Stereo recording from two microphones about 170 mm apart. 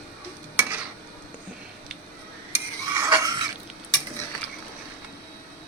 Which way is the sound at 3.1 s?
25° right (ahead or behind).